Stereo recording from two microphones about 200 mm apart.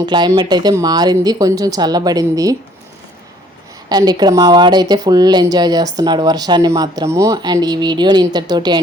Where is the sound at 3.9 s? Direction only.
20° right (ahead or behind).